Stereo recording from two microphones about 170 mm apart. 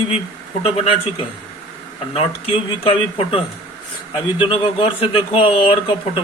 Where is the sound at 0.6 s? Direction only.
35° left (ahead or behind).